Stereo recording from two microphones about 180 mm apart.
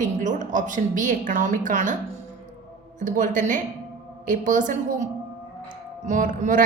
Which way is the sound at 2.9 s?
45° right (ahead or behind).